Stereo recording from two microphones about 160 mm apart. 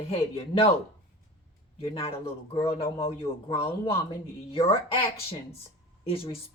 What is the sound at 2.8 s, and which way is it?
Speech, 15° left (ahead or behind).